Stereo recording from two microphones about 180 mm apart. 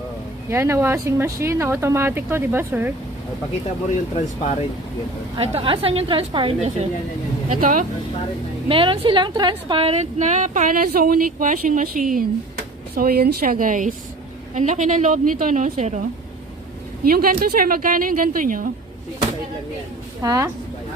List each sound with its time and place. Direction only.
0.5 s speech: 15° right (ahead or behind)
5.4 s a woman's voice: 30° right (ahead or behind)
7.6 s speech: 50° right (ahead or behind)
8.6 s a woman's voice: 30° right (ahead or behind)
17.0 s speech: 55° right (ahead or behind)
20.2 s speech: 20° right (ahead or behind)